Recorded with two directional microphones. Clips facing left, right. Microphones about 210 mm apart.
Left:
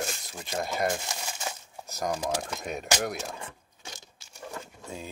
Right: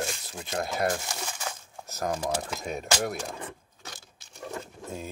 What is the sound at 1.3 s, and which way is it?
Crumpling, 15° left (ahead or behind).